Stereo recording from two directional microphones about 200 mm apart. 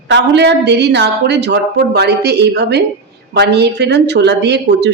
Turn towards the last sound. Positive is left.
turn(degrees=-60)  # may be behind; listen again after turning